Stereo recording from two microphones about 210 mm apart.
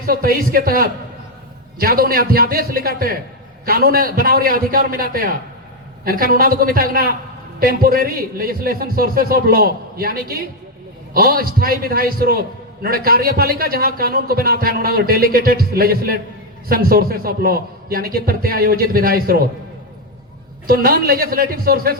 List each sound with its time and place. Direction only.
0.0 s a man's voice: 45° right (ahead or behind)
20.7 s a man's voice: 45° right (ahead or behind)